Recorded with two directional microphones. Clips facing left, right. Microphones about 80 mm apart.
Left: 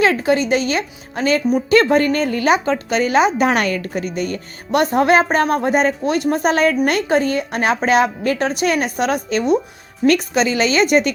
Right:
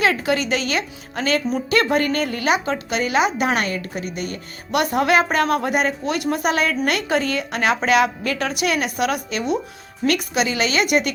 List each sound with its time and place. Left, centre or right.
0.0 s a woman's voice: left